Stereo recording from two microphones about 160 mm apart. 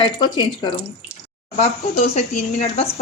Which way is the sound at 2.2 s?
45° left (ahead or behind).